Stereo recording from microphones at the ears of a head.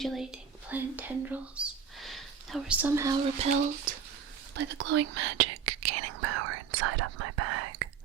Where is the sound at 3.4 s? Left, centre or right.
Right.